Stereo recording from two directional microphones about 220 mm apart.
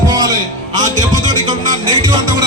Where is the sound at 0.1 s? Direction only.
20° right (ahead or behind).